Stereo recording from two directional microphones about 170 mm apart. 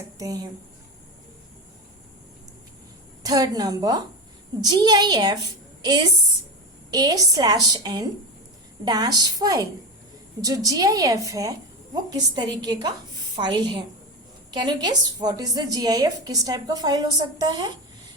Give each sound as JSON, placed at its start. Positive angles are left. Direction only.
{"t": 0.2, "sound": "a woman's voice", "side_deg": -20}
{"t": 3.2, "sound": "a woman's voice", "side_deg": -20}